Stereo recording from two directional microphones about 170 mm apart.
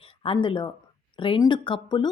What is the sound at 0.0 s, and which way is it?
Speech, 30° left (ahead or behind).